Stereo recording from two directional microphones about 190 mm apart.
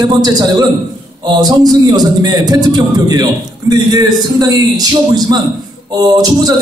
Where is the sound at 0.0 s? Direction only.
20° right (ahead or behind).